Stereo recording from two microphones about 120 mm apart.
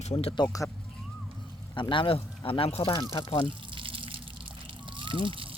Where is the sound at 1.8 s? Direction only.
45° left (ahead or behind).